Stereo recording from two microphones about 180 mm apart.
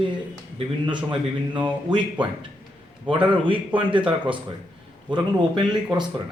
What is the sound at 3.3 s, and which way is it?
A man's voice, 30° right (ahead or behind).